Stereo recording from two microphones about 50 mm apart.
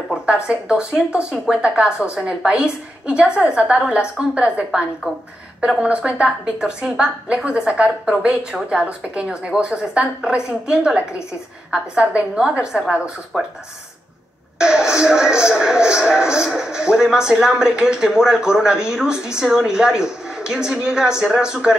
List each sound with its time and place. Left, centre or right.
0.1 s a woman's voice: centre
5.8 s a woman's voice: right
13.3 s speech: centre
14.6 s speech: centre